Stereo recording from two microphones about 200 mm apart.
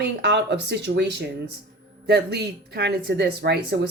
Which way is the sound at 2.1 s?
55° right (ahead or behind).